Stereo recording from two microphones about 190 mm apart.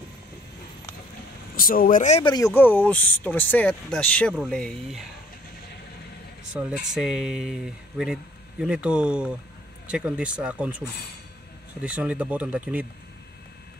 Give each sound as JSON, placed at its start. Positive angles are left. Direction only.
{"t": 1.6, "sound": "speech", "side_deg": 50}
{"t": 2.2, "sound": "speech", "side_deg": 20}
{"t": 6.5, "sound": "speech", "side_deg": -5}